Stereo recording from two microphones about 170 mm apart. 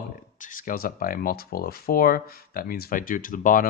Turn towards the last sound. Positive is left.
turn(degrees=55)  # may be behind; listen again after turning